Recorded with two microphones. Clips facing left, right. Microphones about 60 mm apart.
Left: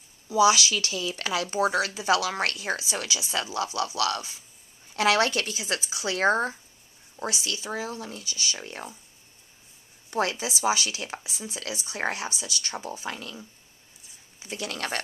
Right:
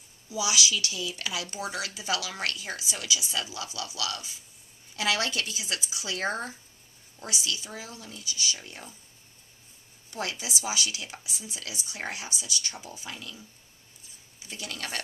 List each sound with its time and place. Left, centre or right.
0.3 s speech: left
10.1 s speech: left
14.6 s speech: left